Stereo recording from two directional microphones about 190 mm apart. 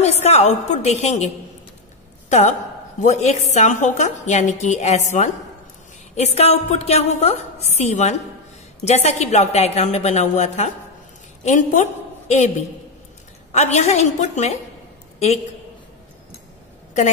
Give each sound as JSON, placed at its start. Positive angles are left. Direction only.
{"t": 0.0, "sound": "a woman's voice", "side_deg": 35}
{"t": 13.5, "sound": "a woman's voice", "side_deg": 35}